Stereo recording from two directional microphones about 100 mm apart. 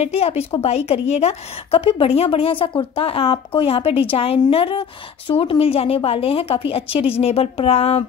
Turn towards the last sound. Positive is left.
turn(degrees=90)